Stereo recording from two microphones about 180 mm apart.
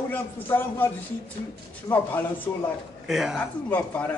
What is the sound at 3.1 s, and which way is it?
Speech, 5° right (ahead or behind).